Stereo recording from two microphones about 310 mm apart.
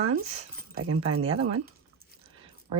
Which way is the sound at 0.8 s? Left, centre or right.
Right.